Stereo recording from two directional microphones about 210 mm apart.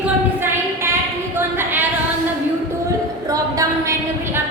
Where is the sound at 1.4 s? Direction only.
10° right (ahead or behind).